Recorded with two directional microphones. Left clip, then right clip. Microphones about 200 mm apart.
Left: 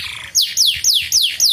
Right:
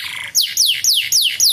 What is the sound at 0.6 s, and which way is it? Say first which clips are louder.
Music: right 1 dB; 15° right (ahead or behind).